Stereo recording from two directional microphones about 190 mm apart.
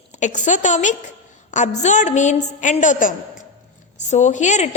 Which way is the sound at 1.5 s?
40° left (ahead or behind).